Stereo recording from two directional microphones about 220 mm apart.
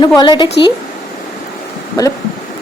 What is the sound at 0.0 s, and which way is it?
Speech, 20° left (ahead or behind).